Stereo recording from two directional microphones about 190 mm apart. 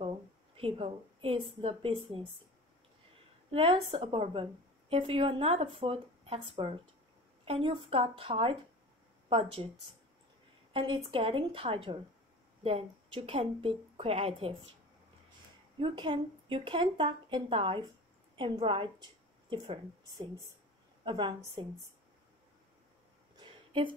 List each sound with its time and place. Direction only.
0.6 s a woman's voice: 30° right (ahead or behind)
3.5 s a woman's voice: 30° right (ahead or behind)
10.7 s a woman's voice: 30° right (ahead or behind)
15.8 s a woman's voice: 25° right (ahead or behind)
23.4 s a sound: 25° right (ahead or behind)